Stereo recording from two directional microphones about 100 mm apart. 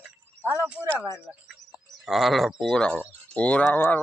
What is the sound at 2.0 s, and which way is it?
Speech, centre (ahead or behind).